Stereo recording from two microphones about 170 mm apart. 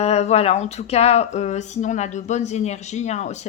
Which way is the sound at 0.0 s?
40° left (ahead or behind).